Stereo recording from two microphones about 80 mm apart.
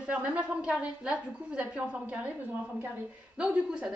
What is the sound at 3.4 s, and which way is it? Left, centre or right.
Speech, centre.